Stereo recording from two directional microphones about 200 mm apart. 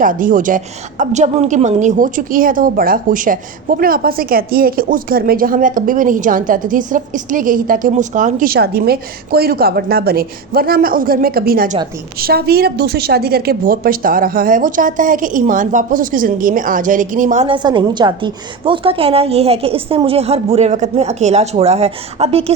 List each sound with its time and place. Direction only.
0.0 s a woman's voice: 40° right (ahead or behind)